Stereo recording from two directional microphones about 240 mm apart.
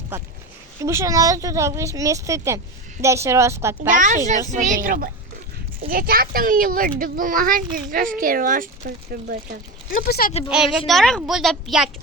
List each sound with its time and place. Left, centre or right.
0.8 s speech: centre
3.8 s speech: right
9.9 s speech: left
10.5 s a child's voice: centre